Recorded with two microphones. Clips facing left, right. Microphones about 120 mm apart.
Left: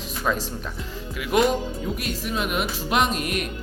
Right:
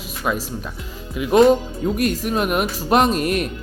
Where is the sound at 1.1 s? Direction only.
25° right (ahead or behind).